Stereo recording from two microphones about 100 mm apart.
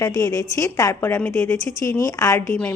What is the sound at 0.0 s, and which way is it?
A woman's voice, 35° left (ahead or behind).